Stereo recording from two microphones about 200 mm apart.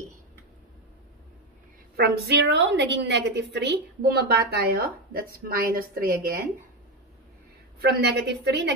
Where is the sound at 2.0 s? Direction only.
60° right (ahead or behind).